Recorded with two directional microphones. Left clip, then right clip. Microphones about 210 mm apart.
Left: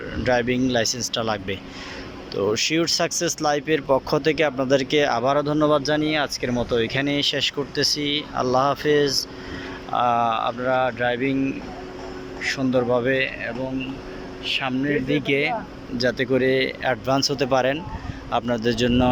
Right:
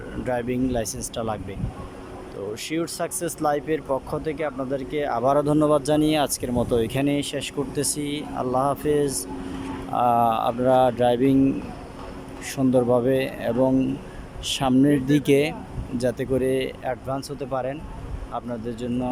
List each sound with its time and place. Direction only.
0.3 s speech: 5° right (ahead or behind)
12.4 s speech: 20° right (ahead or behind); by 19.1 s 5° left (ahead or behind)